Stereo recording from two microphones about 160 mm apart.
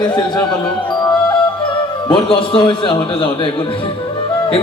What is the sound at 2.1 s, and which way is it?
Speech, 35° left (ahead or behind).